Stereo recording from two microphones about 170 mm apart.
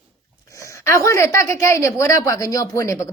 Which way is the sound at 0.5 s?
15° left (ahead or behind).